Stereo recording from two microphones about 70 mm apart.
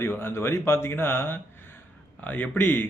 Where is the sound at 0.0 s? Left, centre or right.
Left.